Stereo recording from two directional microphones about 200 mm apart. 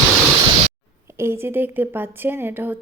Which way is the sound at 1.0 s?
15° right (ahead or behind).